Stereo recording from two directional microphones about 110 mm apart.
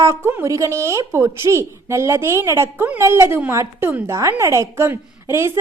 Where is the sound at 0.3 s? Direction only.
25° right (ahead or behind).